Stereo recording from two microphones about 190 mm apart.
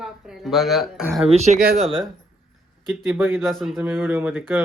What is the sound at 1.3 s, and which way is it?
Speech, 35° right (ahead or behind).